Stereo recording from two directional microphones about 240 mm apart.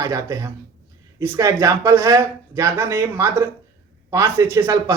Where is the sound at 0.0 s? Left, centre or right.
Centre.